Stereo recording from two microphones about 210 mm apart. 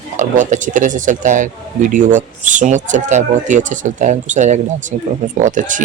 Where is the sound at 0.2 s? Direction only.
35° right (ahead or behind).